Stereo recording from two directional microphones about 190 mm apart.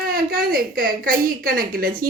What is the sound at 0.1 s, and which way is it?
A woman's voice, 50° right (ahead or behind).